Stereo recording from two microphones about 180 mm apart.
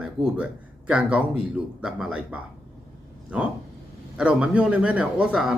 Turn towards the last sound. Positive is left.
turn(degrees=-5)  # may be behind; listen again after turning